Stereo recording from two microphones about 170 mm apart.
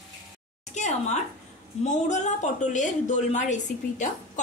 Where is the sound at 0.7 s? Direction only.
45° left (ahead or behind).